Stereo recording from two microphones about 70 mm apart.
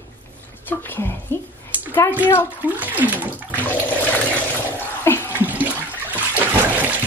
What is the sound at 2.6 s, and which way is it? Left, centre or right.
Speech, right.